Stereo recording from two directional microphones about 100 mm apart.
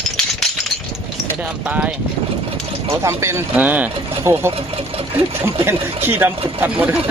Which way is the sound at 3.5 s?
15° right (ahead or behind).